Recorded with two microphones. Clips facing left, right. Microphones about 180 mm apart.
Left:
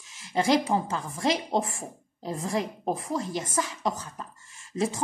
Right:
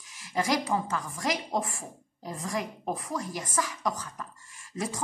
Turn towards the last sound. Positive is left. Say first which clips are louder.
# left 6 dB
turn(degrees=25)  # may be behind; listen again after turning